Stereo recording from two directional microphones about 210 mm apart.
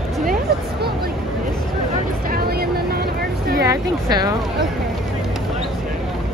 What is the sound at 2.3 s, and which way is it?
Vehicle, 50° right (ahead or behind).